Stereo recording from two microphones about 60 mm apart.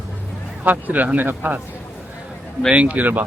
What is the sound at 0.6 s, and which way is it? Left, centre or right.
Speech, right.